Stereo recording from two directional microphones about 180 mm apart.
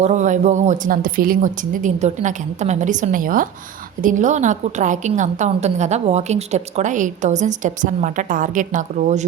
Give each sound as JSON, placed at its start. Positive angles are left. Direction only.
{"t": 0.0, "sound": "a woman's voice", "side_deg": -40}